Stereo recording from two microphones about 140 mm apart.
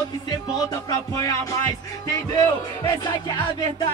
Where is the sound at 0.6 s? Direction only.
25° left (ahead or behind).